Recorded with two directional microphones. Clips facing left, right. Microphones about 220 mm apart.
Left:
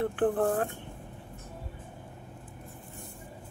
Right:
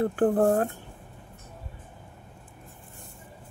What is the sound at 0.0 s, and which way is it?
Speech, 40° right (ahead or behind).